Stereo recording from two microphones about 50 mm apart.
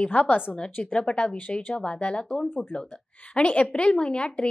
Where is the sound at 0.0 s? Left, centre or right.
Left.